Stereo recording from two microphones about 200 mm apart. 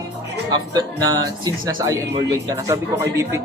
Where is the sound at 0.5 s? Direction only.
20° right (ahead or behind).